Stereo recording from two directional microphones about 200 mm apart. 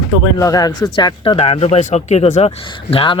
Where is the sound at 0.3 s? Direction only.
15° left (ahead or behind).